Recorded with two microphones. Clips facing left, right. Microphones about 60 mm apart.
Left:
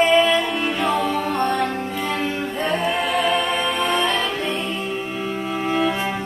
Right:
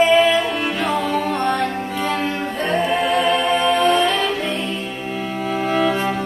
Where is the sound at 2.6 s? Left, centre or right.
Centre.